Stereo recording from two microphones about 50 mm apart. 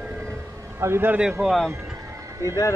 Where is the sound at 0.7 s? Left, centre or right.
Right.